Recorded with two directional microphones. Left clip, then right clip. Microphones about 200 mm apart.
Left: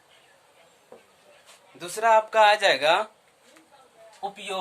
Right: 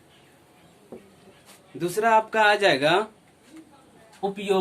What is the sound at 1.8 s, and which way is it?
Speech, 15° left (ahead or behind).